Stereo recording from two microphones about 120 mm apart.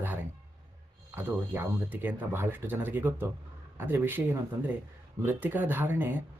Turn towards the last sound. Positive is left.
turn(degrees=-15)  # may be behind; listen again after turning